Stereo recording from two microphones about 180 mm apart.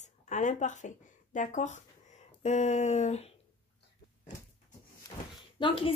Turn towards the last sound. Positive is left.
turn(degrees=30)  # may be behind; listen again after turning